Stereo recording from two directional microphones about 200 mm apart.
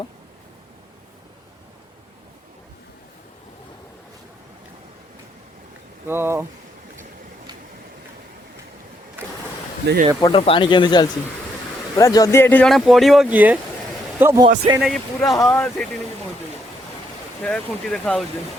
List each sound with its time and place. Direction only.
6.1 s speech: 10° right (ahead or behind)
10.2 s a man's voice: 20° left (ahead or behind); by 14.4 s 10° right (ahead or behind)
14.8 s speech: centre (ahead or behind)
15.2 s speech: 15° left (ahead or behind)
17.4 s speech: 5° left (ahead or behind)